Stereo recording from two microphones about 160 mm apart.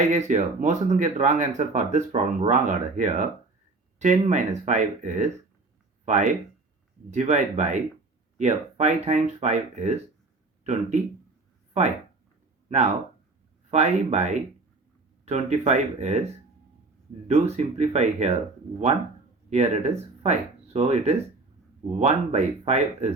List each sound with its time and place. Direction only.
0.0 s speech: 50° right (ahead or behind)
13.7 s speech: 45° right (ahead or behind)
19.5 s speech: 45° right (ahead or behind)